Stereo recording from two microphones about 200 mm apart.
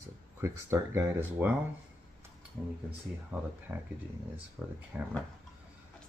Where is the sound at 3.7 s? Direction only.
10° right (ahead or behind).